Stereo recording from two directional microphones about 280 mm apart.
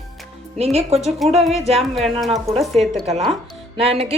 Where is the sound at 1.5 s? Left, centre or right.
Right.